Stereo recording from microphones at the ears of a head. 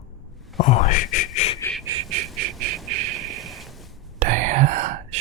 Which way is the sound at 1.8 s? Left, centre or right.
Right.